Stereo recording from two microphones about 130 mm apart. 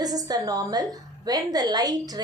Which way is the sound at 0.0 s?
30° right (ahead or behind).